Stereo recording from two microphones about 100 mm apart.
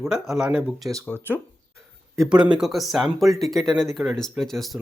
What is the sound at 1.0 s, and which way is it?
Speech, 20° left (ahead or behind).